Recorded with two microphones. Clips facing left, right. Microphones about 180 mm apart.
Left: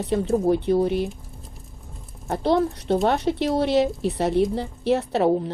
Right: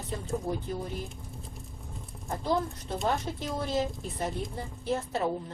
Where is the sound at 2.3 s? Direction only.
75° left (ahead or behind).